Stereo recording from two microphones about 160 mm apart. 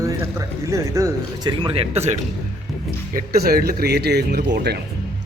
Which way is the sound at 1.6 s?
40° right (ahead or behind).